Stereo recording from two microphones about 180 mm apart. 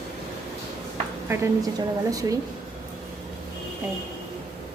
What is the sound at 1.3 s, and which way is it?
A woman's voice, 20° right (ahead or behind).